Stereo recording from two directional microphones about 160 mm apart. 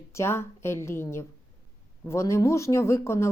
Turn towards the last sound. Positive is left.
turn(degrees=15)  # may be behind; listen again after turning